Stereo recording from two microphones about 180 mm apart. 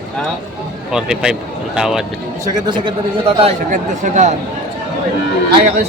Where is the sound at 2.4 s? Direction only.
25° right (ahead or behind).